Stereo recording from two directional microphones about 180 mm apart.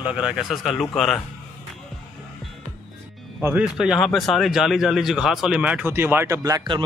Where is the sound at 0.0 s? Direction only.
5° right (ahead or behind).